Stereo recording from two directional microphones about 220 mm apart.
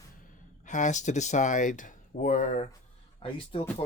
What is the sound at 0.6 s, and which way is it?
Speech, 35° left (ahead or behind).